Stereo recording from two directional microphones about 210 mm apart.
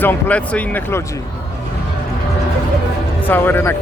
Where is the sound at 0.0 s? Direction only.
10° left (ahead or behind).